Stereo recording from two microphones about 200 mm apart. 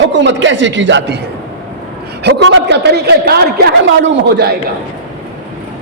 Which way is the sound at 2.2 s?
65° right (ahead or behind).